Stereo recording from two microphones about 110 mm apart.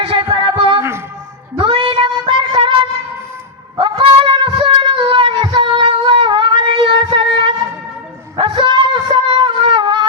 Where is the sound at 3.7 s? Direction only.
50° right (ahead or behind).